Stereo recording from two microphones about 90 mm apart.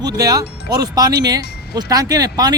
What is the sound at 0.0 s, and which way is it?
Speech, 45° right (ahead or behind).